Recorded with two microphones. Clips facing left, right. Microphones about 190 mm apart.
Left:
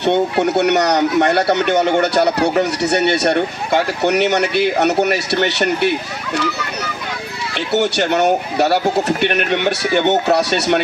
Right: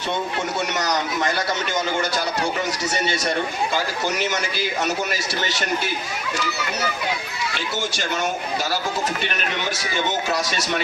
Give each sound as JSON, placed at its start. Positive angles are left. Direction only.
{"t": 0.0, "sound": "speech", "side_deg": 65}
{"t": 7.7, "sound": "speech", "side_deg": 65}